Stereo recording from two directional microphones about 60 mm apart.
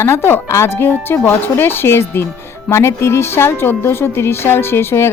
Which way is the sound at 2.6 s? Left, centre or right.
Left.